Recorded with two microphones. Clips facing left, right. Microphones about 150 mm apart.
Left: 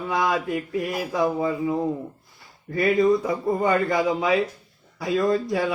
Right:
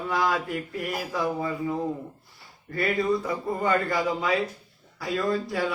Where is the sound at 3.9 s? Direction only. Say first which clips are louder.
Left 4 dB; 20° left (ahead or behind).